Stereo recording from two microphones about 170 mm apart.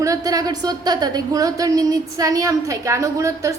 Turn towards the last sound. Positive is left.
turn(degrees=-15)  # may be behind; listen again after turning